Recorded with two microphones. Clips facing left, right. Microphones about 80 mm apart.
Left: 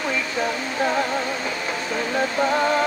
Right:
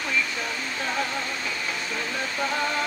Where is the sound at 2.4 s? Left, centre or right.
Left.